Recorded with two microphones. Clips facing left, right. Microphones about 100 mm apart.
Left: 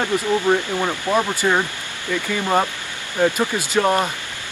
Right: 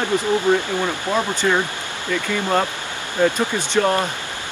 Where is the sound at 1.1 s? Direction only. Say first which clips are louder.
Left 1 dB; 10° left (ahead or behind).